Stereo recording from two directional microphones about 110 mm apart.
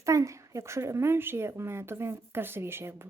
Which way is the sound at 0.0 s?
30° right (ahead or behind).